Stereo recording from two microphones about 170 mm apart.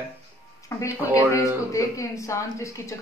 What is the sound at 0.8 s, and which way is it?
Speech, 20° left (ahead or behind).